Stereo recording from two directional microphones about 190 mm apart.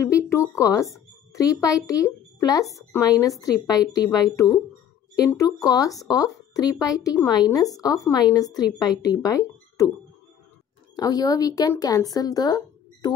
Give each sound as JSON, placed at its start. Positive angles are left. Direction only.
{"t": 0.1, "sound": "a child's voice", "side_deg": 15}
{"t": 11.0, "sound": "speech", "side_deg": 20}